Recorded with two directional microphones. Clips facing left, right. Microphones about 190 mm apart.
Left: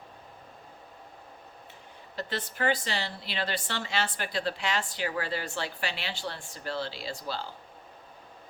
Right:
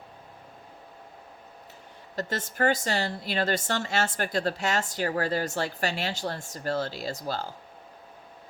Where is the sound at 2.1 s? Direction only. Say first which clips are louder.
Right 4 dB; 45° right (ahead or behind).